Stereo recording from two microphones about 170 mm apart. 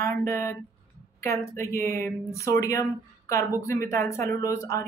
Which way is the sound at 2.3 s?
20° left (ahead or behind).